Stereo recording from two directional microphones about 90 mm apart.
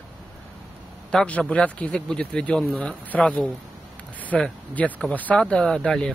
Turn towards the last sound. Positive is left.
turn(degrees=5)  # may be behind; listen again after turning